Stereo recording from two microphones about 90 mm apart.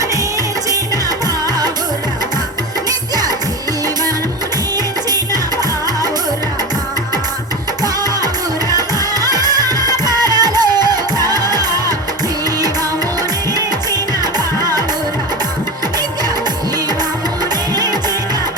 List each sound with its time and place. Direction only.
8.7 s music: 45° right (ahead or behind)
14.3 s music: 45° right (ahead or behind)